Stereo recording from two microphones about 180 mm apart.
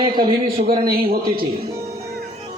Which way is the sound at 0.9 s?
55° right (ahead or behind).